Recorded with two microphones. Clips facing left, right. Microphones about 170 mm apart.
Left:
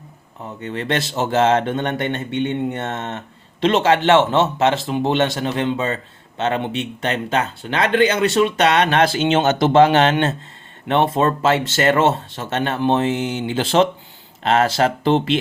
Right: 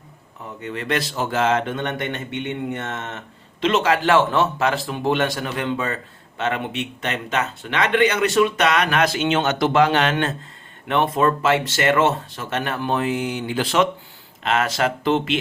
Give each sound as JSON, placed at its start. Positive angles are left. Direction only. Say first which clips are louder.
{"t": 0.6, "sound": "speech", "louder": "left 2 dB", "side_deg": 30}